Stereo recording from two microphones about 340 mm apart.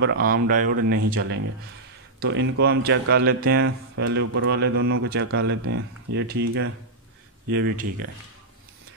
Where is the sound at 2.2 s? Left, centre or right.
Right.